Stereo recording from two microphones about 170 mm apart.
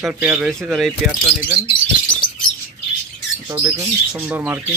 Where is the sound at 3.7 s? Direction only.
20° right (ahead or behind).